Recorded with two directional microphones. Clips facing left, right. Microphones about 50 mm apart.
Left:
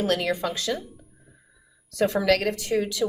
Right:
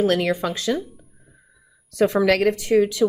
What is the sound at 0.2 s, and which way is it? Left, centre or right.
Speech, right.